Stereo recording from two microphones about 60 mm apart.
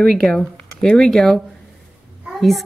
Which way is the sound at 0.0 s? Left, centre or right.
Centre.